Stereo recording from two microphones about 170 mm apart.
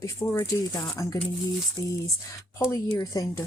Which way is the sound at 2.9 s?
20° left (ahead or behind).